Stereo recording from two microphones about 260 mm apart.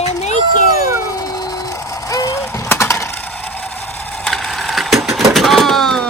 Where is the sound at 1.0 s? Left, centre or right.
Centre.